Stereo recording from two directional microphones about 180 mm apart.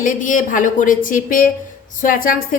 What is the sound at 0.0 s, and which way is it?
A woman's voice, 45° left (ahead or behind).